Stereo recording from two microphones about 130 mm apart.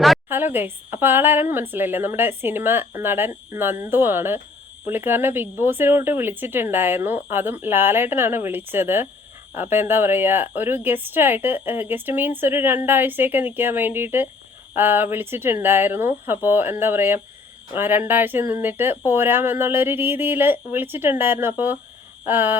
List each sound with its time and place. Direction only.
0.3 s speech: 15° right (ahead or behind)